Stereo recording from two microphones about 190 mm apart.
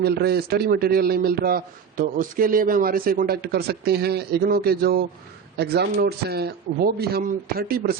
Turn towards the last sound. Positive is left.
turn(degrees=-50)  # may be behind; listen again after turning